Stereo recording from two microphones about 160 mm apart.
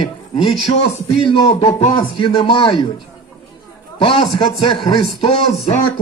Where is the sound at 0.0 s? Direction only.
35° left (ahead or behind).